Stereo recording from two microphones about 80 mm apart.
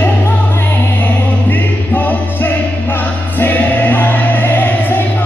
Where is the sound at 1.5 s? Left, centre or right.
Left.